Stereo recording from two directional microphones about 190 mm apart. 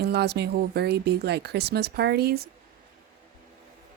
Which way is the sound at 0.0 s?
60° right (ahead or behind).